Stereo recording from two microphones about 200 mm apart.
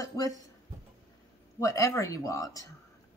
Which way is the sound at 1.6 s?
15° left (ahead or behind).